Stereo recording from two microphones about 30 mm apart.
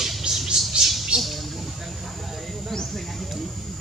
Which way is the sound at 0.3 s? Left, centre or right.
Right.